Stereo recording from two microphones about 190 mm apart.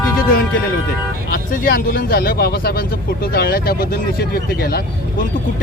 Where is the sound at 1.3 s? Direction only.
45° left (ahead or behind).